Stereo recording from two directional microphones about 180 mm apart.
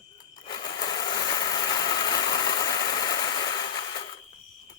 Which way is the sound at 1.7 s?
20° left (ahead or behind).